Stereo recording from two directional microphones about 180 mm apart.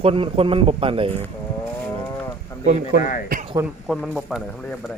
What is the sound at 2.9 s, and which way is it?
Speech, 65° right (ahead or behind).